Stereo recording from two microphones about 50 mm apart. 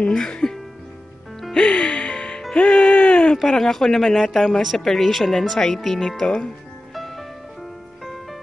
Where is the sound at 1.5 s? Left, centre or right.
Centre.